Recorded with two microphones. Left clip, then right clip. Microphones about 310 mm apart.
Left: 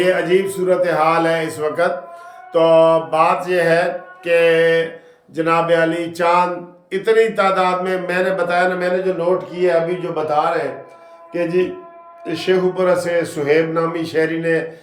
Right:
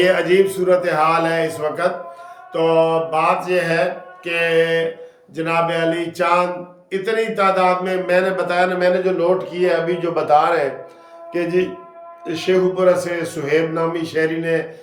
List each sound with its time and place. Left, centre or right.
0.0 s music: centre
9.5 s a man's voice: centre
11.3 s music: centre